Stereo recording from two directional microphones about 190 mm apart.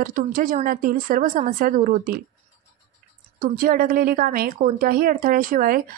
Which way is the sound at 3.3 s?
50° right (ahead or behind).